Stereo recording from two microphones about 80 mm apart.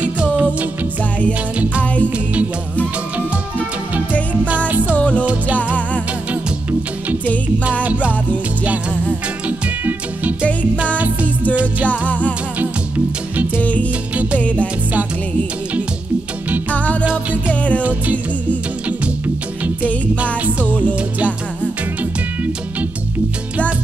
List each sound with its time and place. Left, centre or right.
0.0 s music: centre
2.0 s music: centre
4.5 s music: centre
4.9 s music: centre
5.2 s music: centre
7.8 s music: centre
9.5 s music: centre
12.1 s music: centre
12.5 s music: centre
13.6 s music: centre
16.7 s music: centre
17.0 s music: centre
17.5 s music: centre
17.8 s music: centre